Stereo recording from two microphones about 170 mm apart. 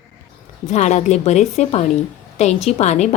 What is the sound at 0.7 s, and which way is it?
A woman's voice, 45° left (ahead or behind).